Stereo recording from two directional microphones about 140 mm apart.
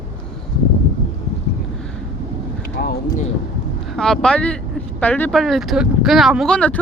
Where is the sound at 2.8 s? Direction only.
80° left.